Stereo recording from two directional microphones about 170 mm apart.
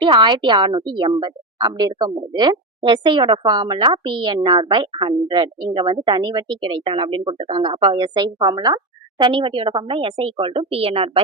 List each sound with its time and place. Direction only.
0.0 s a woman's voice: 25° right (ahead or behind)